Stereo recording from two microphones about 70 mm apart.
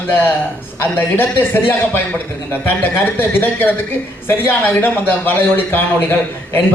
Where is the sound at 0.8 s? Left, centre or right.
Left.